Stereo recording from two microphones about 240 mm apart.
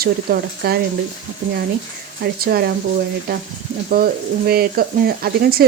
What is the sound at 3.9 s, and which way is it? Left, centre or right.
Speech, right.